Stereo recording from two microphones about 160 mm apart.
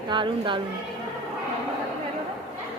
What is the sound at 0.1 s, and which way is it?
Speech, 30° right (ahead or behind).